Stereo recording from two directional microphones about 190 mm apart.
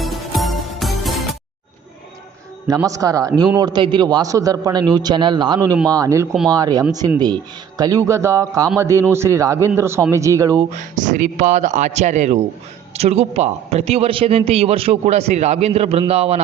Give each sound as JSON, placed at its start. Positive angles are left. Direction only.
{"t": 0.0, "sound": "music", "side_deg": 0}
{"t": 2.6, "sound": "a man's voice", "side_deg": -15}
{"t": 10.8, "sound": "a man's voice", "side_deg": -40}